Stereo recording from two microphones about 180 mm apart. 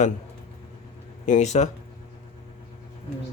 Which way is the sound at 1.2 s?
40° left (ahead or behind).